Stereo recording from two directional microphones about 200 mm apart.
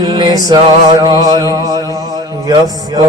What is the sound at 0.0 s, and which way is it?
Music, 20° right (ahead or behind).